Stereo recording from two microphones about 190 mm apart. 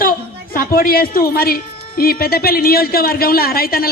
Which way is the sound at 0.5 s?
50° left (ahead or behind).